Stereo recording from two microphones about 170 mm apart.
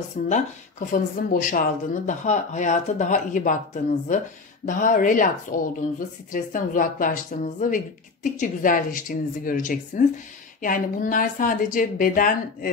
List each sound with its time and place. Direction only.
0.3 s a woman's voice: 50° left (ahead or behind)